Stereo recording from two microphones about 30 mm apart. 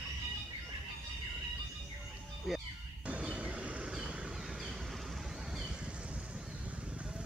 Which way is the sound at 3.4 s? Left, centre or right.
Right.